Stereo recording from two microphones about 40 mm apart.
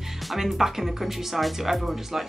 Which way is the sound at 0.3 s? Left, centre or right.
Centre.